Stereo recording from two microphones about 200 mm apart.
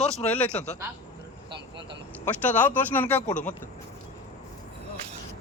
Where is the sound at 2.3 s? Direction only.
10° left (ahead or behind).